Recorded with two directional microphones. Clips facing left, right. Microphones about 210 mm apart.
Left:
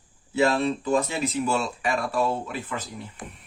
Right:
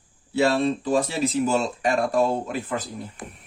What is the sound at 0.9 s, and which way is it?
Speech, 35° right (ahead or behind).